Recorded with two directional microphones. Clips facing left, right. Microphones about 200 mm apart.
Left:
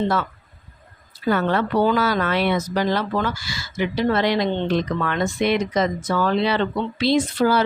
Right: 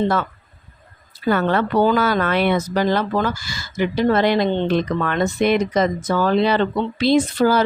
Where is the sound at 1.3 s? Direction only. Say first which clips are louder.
Right 2 dB; 60° right (ahead or behind).